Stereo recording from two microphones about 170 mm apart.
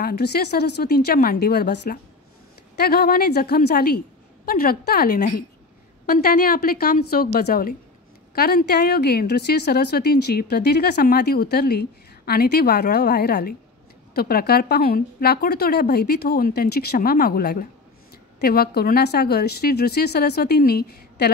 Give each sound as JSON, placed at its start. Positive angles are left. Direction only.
{"t": 0.0, "sound": "speech", "side_deg": 75}